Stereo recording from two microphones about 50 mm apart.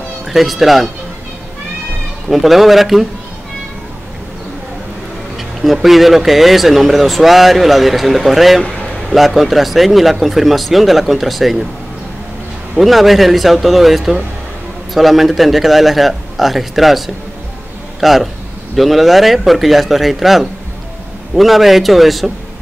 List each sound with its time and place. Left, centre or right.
0.3 s speech: centre
2.2 s speech: centre
5.6 s speech: centre
8.6 s a sound: centre
9.1 s speech: centre
12.7 s speech: centre